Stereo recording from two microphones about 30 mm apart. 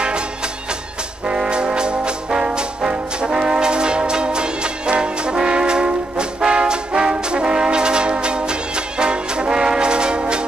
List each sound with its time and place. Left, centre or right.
1.4 s trombone: right
2.9 s music: right
5.0 s brass instrument: right